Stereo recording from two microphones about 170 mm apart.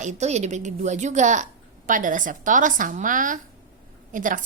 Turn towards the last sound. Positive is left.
turn(degrees=-50)  # may be behind; listen again after turning